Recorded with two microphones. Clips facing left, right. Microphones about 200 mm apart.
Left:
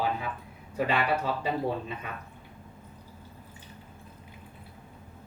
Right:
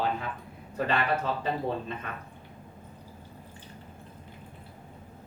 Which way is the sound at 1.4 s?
10° left (ahead or behind).